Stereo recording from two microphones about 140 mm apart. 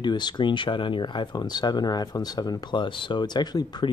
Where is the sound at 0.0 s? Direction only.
30° left (ahead or behind).